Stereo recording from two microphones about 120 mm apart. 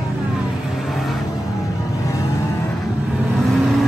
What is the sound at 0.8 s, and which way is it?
Vehicle, centre (ahead or behind).